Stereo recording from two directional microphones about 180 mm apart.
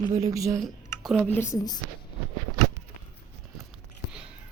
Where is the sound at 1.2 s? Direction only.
10° left (ahead or behind).